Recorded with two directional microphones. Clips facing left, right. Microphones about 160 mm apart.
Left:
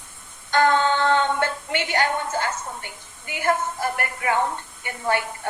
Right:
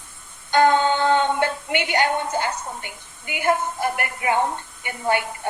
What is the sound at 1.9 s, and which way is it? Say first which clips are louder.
A woman's voice: right 2 dB; 10° right (ahead or behind).